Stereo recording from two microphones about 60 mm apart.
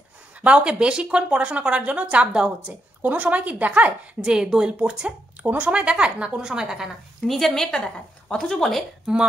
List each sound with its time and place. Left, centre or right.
0.4 s speech: centre
7.2 s speech: centre
9.1 s speech: centre